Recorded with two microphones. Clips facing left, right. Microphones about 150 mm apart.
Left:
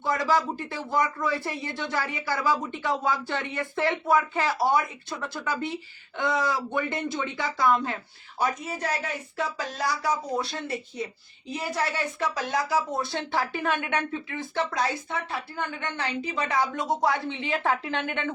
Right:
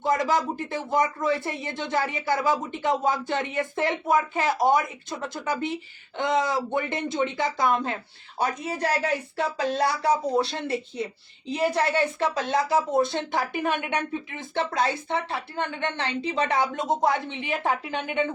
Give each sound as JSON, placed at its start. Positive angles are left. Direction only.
{"t": 0.0, "sound": "speech", "side_deg": -20}
{"t": 12.2, "sound": "a woman's voice", "side_deg": -25}